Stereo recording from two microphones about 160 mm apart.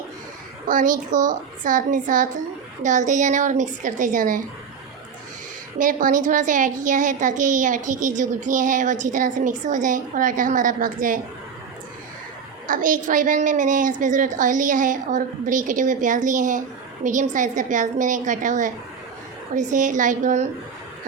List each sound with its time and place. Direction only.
0.7 s a woman's voice: 55° right (ahead or behind)
5.8 s a woman's voice: 55° right (ahead or behind)
12.6 s a woman's voice: 55° right (ahead or behind)